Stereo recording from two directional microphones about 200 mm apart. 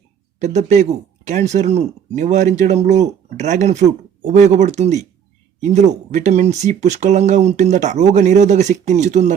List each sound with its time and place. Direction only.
0.3 s speech: 35° right (ahead or behind)